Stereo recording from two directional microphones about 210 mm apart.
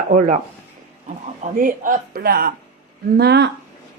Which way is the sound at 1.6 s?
40° right (ahead or behind).